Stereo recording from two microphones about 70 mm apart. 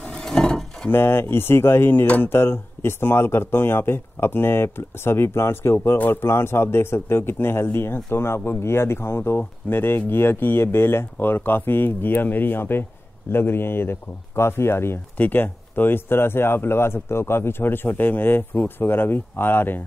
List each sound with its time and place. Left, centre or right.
0.0 s a sound: centre
0.8 s speech: left
15.1 s speech: left